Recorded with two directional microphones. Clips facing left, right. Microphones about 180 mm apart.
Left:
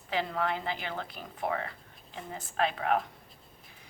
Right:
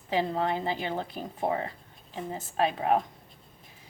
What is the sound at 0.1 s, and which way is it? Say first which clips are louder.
A woman's voice: right 4 dB; 30° right (ahead or behind).